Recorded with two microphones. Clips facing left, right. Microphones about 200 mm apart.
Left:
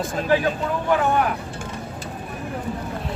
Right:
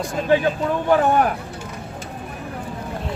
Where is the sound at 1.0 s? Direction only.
40° right (ahead or behind).